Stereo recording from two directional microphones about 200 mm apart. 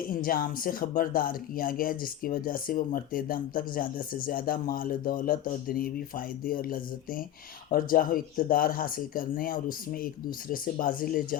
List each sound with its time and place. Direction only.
0.1 s speech: 45° left (ahead or behind)